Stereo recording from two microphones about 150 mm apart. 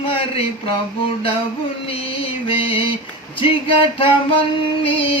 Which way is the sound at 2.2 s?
35° left (ahead or behind).